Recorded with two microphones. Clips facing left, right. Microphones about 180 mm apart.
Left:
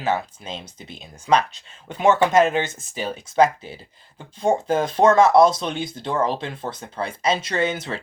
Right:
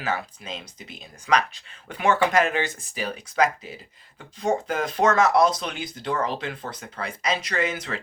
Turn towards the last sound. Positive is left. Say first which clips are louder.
# left 3 dB
turn(degrees=25)  # may be behind; listen again after turning